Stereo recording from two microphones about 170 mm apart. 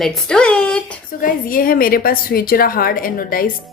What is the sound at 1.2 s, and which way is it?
Speech, 55° left (ahead or behind).